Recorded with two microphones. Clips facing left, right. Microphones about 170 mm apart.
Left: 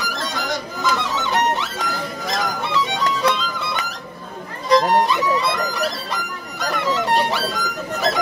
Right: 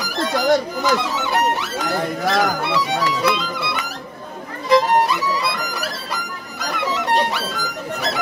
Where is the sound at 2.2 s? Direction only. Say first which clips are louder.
Right 6 dB; 70° right (ahead or behind).